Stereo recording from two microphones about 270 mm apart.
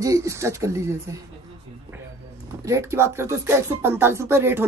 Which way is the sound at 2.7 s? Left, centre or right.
Centre.